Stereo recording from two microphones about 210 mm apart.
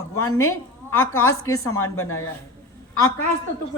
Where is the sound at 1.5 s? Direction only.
90° left.